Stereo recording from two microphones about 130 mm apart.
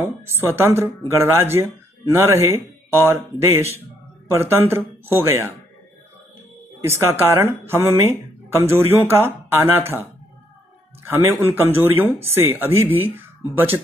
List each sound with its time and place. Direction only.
0.0 s speech: 20° right (ahead or behind)
6.8 s speech: 20° right (ahead or behind)
11.1 s speech: 20° right (ahead or behind)